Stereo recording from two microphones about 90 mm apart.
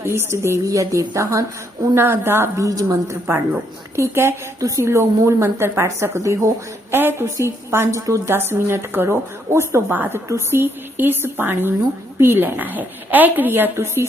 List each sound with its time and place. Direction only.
0.0 s a woman's voice: 30° right (ahead or behind)
2.6 s a woman's voice: 35° right (ahead or behind)